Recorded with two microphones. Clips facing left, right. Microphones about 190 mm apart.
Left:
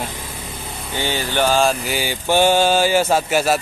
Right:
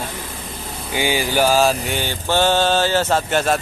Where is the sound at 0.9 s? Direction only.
10° right (ahead or behind).